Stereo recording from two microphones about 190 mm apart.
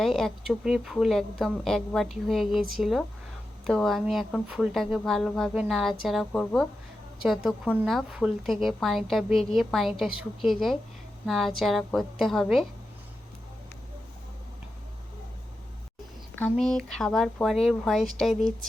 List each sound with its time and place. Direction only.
0.0 s a woman's voice: centre (ahead or behind)
16.4 s a woman's voice: centre (ahead or behind)